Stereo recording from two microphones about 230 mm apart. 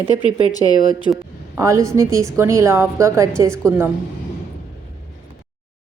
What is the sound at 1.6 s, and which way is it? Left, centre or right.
Speech, centre.